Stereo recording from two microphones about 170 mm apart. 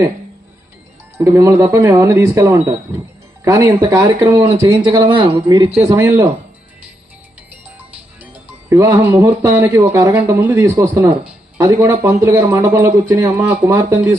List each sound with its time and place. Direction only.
1.2 s speech: 20° right (ahead or behind)
5.8 s speech: 15° right (ahead or behind)
8.2 s speech: 15° right (ahead or behind)
13.3 s speech: 10° right (ahead or behind)